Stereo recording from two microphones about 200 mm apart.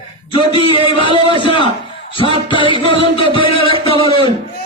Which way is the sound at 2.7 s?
25° left (ahead or behind).